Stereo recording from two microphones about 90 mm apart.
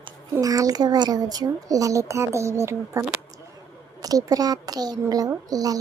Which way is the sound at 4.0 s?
45° right (ahead or behind).